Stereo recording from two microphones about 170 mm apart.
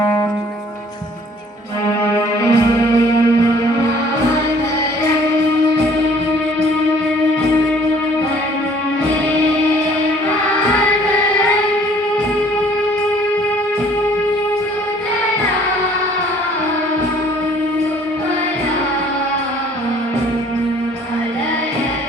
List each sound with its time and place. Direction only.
2.0 s music: 20° left (ahead or behind)